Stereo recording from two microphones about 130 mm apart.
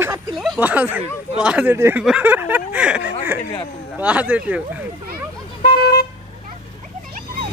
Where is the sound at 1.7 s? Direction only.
20° right (ahead or behind).